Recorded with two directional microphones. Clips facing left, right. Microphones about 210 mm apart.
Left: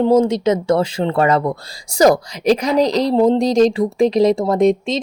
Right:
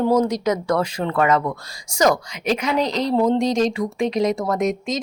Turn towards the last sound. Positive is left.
turn(degrees=30)  # may be behind; listen again after turning